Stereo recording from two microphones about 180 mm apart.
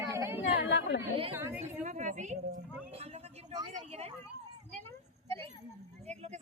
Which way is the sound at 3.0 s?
30° right (ahead or behind).